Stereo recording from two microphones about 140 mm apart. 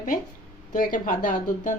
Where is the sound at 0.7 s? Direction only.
70° left (ahead or behind).